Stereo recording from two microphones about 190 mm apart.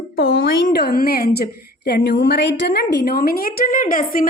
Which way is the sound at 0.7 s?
55° left (ahead or behind).